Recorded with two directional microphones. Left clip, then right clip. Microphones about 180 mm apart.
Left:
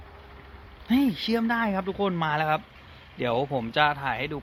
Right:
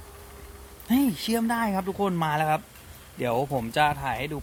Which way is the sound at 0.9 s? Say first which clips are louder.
Even; 15° right (ahead or behind).